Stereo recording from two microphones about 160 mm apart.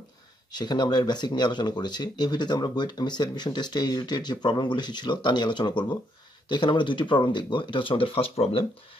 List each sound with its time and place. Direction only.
0.5 s speech: 25° left (ahead or behind)